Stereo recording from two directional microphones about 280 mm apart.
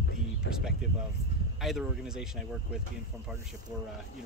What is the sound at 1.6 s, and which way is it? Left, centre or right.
Speech, centre.